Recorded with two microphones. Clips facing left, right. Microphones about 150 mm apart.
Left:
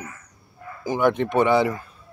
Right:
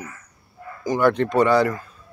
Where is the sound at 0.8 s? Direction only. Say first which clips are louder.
Right 2 dB; 15° left (ahead or behind).